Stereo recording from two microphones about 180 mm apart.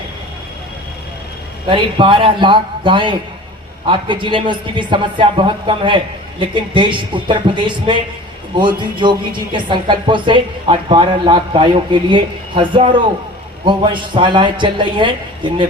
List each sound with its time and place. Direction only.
1.6 s speech: 30° right (ahead or behind)